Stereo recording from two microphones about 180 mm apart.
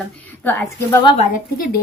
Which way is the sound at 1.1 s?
50° left (ahead or behind).